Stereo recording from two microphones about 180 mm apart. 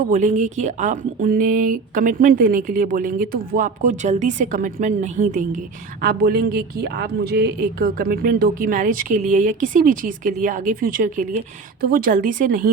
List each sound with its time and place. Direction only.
0.1 s speech: 40° right (ahead or behind)
6.0 s speech: 55° right (ahead or behind)